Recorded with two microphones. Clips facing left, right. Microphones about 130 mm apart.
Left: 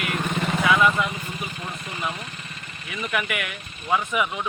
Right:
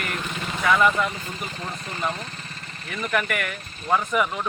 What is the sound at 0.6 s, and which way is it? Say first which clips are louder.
Speech: right 1 dB; 5° left (ahead or behind).